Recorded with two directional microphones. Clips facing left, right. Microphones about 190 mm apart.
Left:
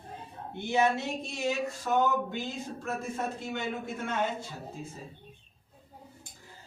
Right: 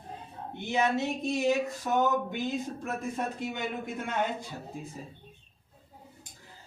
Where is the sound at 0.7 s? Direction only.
20° right (ahead or behind).